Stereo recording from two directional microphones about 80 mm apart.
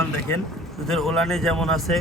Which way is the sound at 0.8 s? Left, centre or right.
Centre.